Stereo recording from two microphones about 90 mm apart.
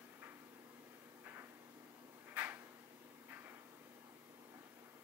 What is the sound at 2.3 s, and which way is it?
Drawer open or close, 20° right (ahead or behind).